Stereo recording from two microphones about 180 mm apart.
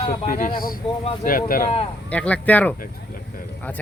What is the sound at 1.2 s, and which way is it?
Speech, 50° left (ahead or behind).